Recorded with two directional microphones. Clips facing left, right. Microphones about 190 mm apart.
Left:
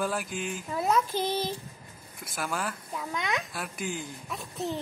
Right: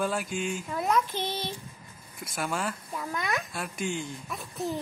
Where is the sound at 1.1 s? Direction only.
40° left (ahead or behind).